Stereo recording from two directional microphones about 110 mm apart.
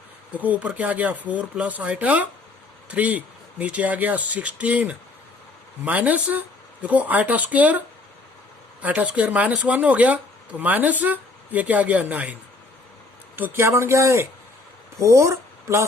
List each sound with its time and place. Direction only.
0.3 s speech: 15° right (ahead or behind)
8.8 s speech: 10° right (ahead or behind)